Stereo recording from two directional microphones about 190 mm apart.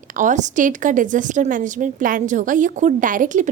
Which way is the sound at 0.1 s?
40° right (ahead or behind).